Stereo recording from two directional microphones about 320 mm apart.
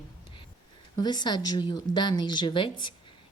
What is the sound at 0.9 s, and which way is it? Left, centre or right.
Speech, centre.